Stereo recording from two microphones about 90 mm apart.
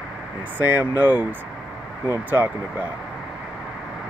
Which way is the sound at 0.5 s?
20° right (ahead or behind).